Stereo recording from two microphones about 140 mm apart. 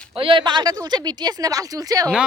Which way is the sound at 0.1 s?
40° right (ahead or behind).